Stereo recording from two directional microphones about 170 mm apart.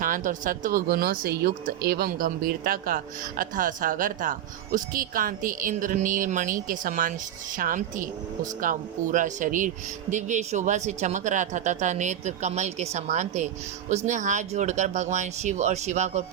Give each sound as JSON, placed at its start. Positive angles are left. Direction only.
{"t": 0.0, "sound": "speech", "side_deg": -50}